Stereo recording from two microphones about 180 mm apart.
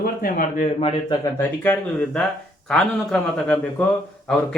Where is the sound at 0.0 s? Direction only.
50° left (ahead or behind).